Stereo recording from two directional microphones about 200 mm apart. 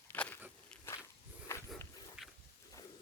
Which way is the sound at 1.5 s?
15° left (ahead or behind).